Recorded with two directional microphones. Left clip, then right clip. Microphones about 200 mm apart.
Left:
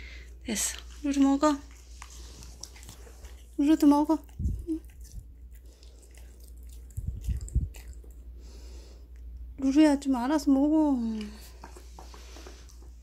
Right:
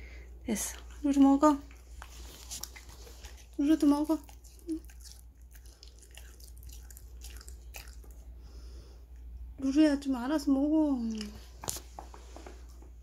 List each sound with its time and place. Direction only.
0.0 s a sound: 15° right (ahead or behind)
3.5 s a woman's voice: 20° left (ahead or behind)
9.6 s a child's voice: 20° left (ahead or behind)